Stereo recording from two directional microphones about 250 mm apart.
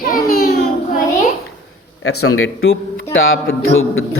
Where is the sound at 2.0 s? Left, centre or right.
Left.